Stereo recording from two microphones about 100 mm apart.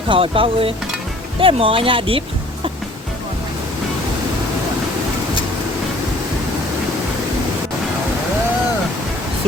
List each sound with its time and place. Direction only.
0.1 s speech: 65° right (ahead or behind)